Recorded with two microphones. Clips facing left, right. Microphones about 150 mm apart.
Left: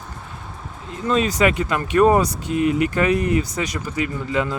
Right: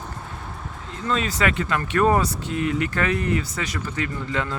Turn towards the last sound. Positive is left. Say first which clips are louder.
# left 4 dB
turn(degrees=15)  # may be behind; listen again after turning